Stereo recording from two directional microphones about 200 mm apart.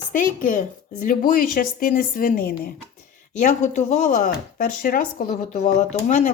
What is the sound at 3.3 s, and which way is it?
Speech, 35° left (ahead or behind).